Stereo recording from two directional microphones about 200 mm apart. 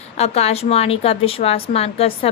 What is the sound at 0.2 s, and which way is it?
A woman's voice, 30° left (ahead or behind).